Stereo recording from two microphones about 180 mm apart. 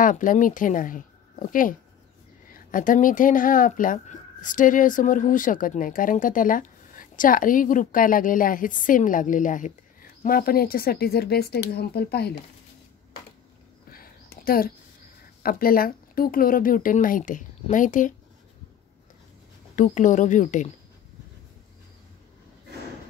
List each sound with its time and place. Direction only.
0.0 s speech: 45° left (ahead or behind); by 12.4 s 65° left (ahead or behind)
13.8 s a sound: 55° left (ahead or behind)
15.4 s speech: 55° left (ahead or behind)
19.7 s speech: 45° left (ahead or behind)